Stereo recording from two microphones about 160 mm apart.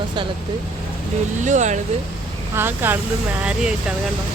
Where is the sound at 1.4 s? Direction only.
50° right (ahead or behind).